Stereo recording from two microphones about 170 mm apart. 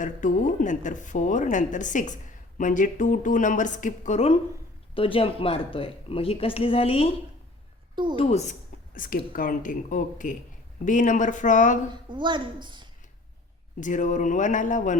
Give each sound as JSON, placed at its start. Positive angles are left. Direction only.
{"t": 0.0, "sound": "speech", "side_deg": 50}
{"t": 8.1, "sound": "speech", "side_deg": 40}
{"t": 12.0, "sound": "a woman's voice", "side_deg": -30}
{"t": 13.7, "sound": "speech", "side_deg": 50}